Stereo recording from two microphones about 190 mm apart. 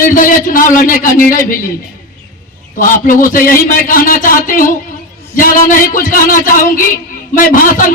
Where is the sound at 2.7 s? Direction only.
45° left (ahead or behind).